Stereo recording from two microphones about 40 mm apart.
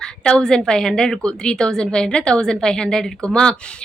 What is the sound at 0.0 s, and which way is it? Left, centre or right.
A woman's voice, centre.